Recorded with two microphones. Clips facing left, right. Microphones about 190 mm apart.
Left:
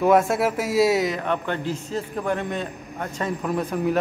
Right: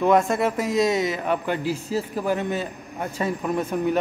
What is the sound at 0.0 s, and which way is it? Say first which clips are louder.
A man's voice: left 1 dB; 5° left (ahead or behind).